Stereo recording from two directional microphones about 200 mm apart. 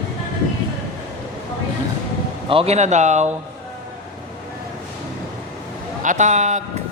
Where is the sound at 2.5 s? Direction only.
30° right (ahead or behind).